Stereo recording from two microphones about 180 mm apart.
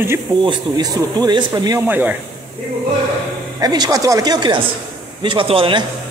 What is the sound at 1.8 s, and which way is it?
Speech, 10° right (ahead or behind).